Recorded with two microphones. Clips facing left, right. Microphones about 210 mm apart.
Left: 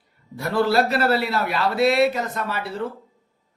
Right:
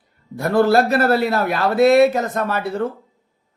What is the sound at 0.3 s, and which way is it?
Speech, 50° right (ahead or behind).